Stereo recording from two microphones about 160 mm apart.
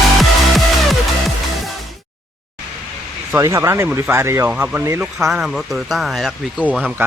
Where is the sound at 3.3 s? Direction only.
20° right (ahead or behind).